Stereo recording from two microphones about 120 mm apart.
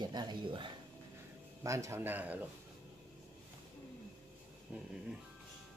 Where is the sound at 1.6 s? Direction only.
25° right (ahead or behind).